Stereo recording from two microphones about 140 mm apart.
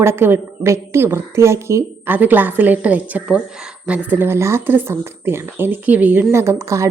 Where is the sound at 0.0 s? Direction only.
15° right (ahead or behind).